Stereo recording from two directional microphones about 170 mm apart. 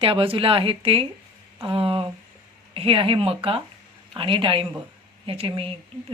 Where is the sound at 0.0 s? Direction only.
30° right (ahead or behind).